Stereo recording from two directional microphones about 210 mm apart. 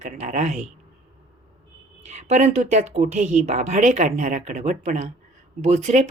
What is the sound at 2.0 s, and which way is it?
Speech, 30° right (ahead or behind).